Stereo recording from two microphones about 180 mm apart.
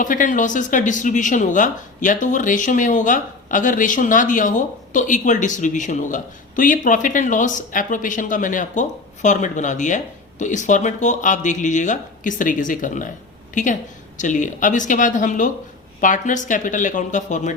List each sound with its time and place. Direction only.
0.0 s a woman's voice: 45° left (ahead or behind)